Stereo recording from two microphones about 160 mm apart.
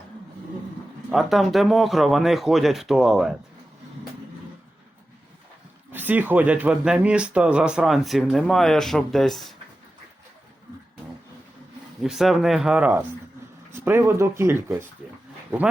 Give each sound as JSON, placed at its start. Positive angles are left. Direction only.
{"t": 1.1, "sound": "speech", "side_deg": 0}
{"t": 5.9, "sound": "speech", "side_deg": -10}
{"t": 12.0, "sound": "speech", "side_deg": 0}